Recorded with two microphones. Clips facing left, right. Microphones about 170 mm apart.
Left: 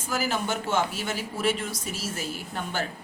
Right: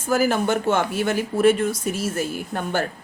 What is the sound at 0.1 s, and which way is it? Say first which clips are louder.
Speech: right 8 dB; 55° right (ahead or behind).